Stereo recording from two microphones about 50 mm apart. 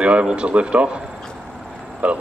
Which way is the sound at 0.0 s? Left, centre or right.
Right.